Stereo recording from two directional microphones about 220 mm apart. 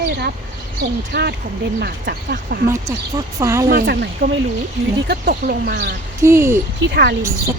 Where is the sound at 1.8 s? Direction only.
45° right (ahead or behind).